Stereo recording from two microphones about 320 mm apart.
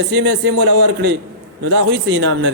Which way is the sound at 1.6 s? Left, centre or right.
Right.